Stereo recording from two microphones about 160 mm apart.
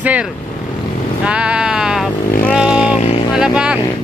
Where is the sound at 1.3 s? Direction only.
5° right (ahead or behind).